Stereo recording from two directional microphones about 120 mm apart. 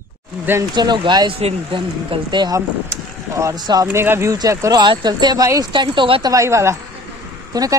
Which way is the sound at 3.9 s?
20° right (ahead or behind).